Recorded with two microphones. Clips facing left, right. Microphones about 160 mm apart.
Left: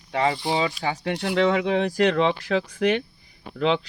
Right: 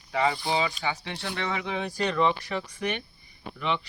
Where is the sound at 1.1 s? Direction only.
75° left (ahead or behind).